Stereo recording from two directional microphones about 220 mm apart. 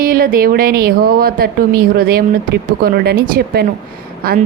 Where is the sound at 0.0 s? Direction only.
40° right (ahead or behind).